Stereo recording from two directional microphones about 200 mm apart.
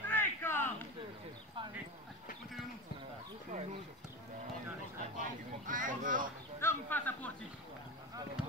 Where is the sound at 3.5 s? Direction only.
35° right (ahead or behind).